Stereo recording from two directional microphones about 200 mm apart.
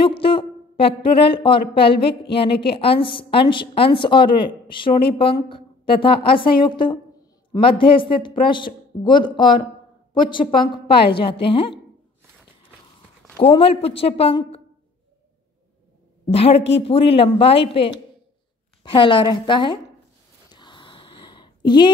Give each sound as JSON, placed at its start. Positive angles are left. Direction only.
{"t": 0.0, "sound": "a woman's voice", "side_deg": 25}
{"t": 1.9, "sound": "a woman's voice", "side_deg": 55}
{"t": 2.8, "sound": "a woman's voice", "side_deg": 25}
{"t": 13.4, "sound": "a woman's voice", "side_deg": 30}
{"t": 16.3, "sound": "a woman's voice", "side_deg": 30}
{"t": 20.5, "sound": "a sound", "side_deg": 25}